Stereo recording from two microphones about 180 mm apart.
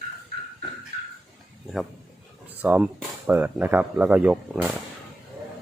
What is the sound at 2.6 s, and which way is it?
Speech, 10° right (ahead or behind).